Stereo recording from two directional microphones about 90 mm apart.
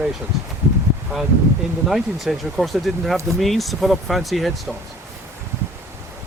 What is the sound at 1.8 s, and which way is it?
Speech, centre (ahead or behind).